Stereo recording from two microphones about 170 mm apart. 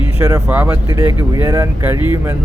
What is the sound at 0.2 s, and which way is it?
Speech, 15° right (ahead or behind).